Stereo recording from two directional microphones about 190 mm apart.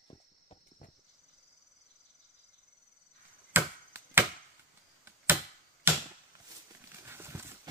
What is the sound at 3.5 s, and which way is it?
Chop, 10° right (ahead or behind).